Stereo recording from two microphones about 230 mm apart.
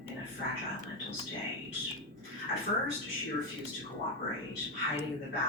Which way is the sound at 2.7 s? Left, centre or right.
Left.